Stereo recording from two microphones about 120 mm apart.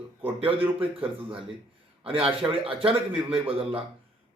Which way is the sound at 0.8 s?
45° right (ahead or behind).